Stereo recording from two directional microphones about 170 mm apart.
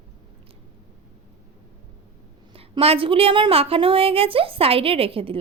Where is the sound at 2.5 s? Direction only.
35° right (ahead or behind).